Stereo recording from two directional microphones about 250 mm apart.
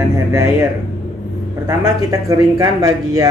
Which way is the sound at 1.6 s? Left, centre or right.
Centre.